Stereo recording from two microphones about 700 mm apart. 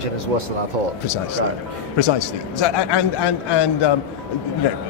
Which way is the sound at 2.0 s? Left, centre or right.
Left.